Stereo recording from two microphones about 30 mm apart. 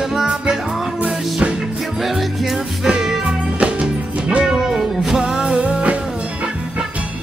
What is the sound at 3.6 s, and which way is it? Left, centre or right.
Music, right.